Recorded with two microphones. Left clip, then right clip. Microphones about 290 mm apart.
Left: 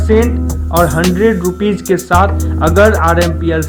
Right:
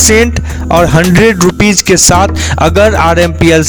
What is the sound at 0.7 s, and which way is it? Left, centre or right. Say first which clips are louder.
Music: right 4 dB; right.